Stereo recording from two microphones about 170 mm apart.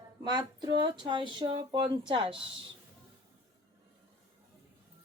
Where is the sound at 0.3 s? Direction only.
25° right (ahead or behind).